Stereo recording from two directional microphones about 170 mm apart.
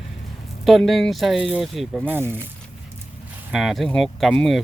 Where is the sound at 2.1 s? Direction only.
15° right (ahead or behind).